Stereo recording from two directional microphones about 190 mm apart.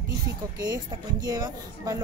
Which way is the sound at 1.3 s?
20° right (ahead or behind).